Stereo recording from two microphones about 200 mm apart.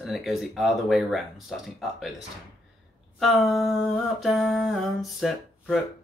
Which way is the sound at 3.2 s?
Centre (ahead or behind).